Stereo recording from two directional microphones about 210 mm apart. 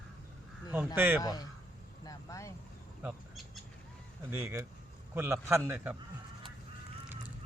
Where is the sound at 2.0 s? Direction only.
15° left (ahead or behind).